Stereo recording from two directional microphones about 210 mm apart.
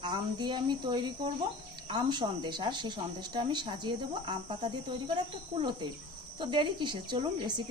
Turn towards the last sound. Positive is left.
turn(degrees=-20)  # may be behind; listen again after turning